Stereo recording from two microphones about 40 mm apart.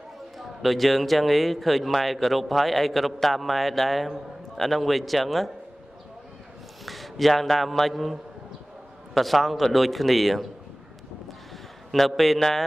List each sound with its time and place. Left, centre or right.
0.4 s a man's voice: centre
6.9 s a man's voice: centre
11.9 s a man's voice: centre